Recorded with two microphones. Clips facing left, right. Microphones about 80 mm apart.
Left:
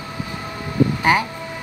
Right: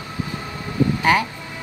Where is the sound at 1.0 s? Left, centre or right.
Centre.